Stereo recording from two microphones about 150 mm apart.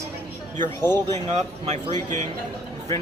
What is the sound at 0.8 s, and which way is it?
Speech, 15° left (ahead or behind).